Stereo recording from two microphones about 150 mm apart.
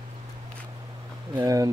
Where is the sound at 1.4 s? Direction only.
25° right (ahead or behind).